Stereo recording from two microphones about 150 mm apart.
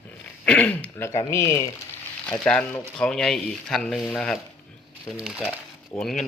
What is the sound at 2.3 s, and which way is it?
Speech, 5° left (ahead or behind).